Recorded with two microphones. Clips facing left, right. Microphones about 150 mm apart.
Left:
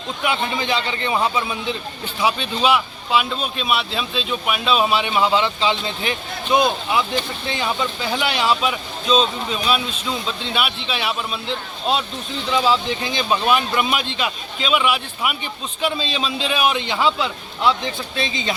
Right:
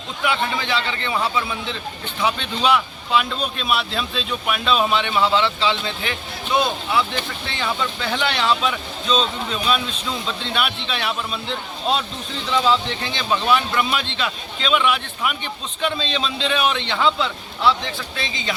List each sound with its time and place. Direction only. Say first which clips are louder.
0.2 s a man's voice: even; 20° left (ahead or behind)
2.2 s a man's voice: left 1 dB; 5° left (ahead or behind); by 18.5 s 25° left (ahead or behind)